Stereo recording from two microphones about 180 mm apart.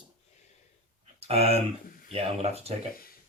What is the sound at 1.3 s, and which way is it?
Speech, 35° right (ahead or behind).